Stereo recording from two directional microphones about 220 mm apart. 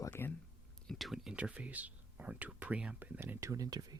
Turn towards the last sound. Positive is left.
turn(degrees=-15)  # may be behind; listen again after turning